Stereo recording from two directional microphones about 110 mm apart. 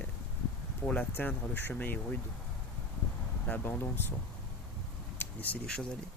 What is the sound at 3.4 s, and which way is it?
Speech, 15° left (ahead or behind).